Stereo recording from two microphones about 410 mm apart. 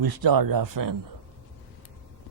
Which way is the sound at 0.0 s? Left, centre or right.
Right.